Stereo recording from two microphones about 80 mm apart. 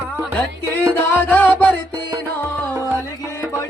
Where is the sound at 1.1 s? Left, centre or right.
Left.